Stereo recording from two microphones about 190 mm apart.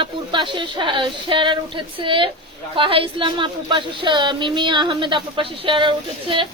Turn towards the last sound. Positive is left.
turn(degrees=-25)  # may be behind; listen again after turning